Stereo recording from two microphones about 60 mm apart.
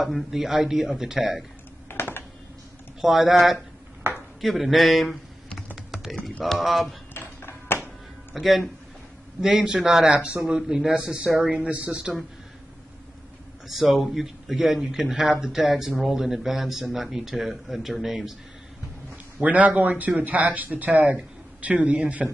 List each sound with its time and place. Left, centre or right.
0.0 s a man's voice: centre
1.9 s computer keyboard: left
3.0 s speech: centre
4.1 s a sound: right
4.4 s speech: centre
5.8 s a sound: centre
6.4 s speech: centre
7.2 s a sound: left
8.4 s a man's voice: centre
13.7 s a man's voice: centre
19.4 s speech: right